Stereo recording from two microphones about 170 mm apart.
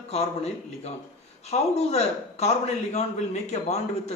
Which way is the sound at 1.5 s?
40° left (ahead or behind).